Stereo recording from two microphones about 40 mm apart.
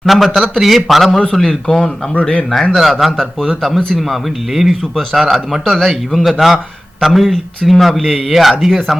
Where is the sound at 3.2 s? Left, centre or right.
Centre.